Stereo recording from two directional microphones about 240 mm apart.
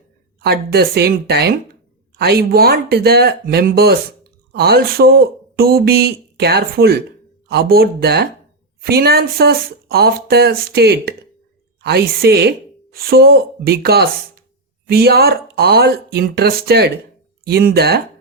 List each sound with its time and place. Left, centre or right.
0.4 s a woman's voice: right